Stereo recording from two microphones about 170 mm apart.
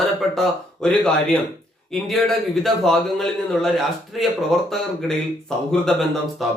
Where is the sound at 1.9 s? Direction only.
Centre (ahead or behind).